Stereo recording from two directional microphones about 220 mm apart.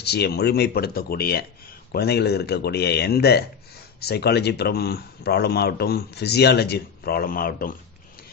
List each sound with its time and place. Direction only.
0.0 s a man's voice: 50° left (ahead or behind)